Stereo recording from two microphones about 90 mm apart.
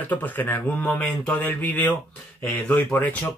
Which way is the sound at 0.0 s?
20° left (ahead or behind).